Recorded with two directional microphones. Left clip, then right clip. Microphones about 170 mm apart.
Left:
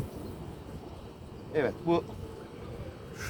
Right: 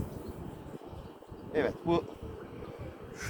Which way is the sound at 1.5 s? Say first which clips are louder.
Left 1 dB; 10° left (ahead or behind).